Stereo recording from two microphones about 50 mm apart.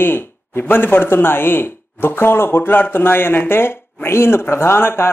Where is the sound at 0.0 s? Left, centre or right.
Left.